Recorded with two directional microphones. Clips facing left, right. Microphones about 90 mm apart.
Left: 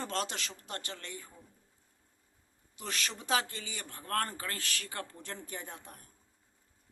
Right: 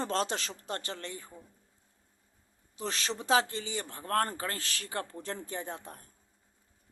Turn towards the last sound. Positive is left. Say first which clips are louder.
# right 6 dB
turn(degrees=-35)  # may be behind; listen again after turning